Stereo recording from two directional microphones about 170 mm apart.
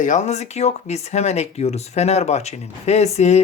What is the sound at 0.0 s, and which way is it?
Speech, 45° left (ahead or behind).